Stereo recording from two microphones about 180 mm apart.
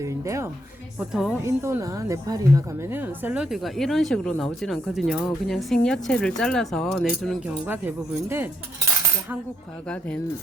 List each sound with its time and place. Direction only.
0.0 s speech: 15° right (ahead or behind)
0.9 s a woman's voice: 5° right (ahead or behind)
1.5 s a woman's voice: 15° right (ahead or behind)